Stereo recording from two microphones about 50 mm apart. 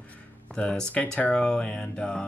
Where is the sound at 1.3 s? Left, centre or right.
Centre.